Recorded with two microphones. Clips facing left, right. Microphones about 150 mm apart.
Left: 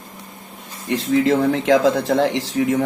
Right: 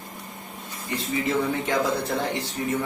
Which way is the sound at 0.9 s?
90° left.